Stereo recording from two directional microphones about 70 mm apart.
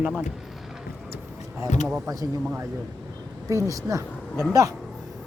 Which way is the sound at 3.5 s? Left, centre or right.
Right.